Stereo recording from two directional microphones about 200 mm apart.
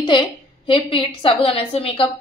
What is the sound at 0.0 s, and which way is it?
A woman's voice, 25° left (ahead or behind).